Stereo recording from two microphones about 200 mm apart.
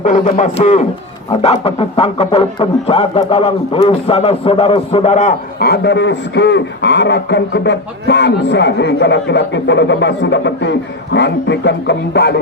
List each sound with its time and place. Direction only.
0.0 s a man's voice: 35° left (ahead or behind)
5.5 s a man's voice: 50° left (ahead or behind)